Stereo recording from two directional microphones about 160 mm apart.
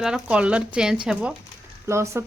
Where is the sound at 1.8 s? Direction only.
15° right (ahead or behind).